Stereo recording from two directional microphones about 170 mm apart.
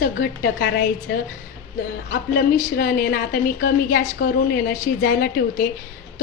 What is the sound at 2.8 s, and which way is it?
A woman's voice, 60° left (ahead or behind).